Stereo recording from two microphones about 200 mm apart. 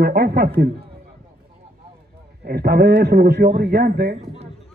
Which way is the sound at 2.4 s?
50° right (ahead or behind).